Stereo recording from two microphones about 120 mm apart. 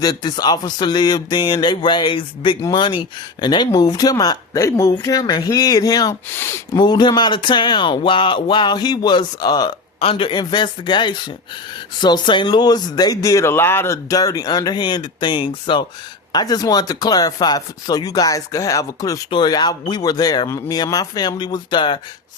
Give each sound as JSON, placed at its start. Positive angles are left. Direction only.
{"t": 0.0, "sound": "speech", "side_deg": 35}
{"t": 6.3, "sound": "speech", "side_deg": 20}
{"t": 6.7, "sound": "speech", "side_deg": 35}
{"t": 10.0, "sound": "speech", "side_deg": 50}
{"t": 19.3, "sound": "speech", "side_deg": 40}